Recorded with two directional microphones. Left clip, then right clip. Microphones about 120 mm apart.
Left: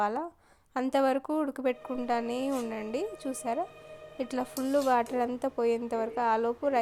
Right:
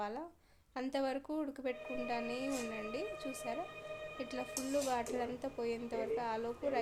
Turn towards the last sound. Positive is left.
turn(degrees=45)  # may be behind; listen again after turning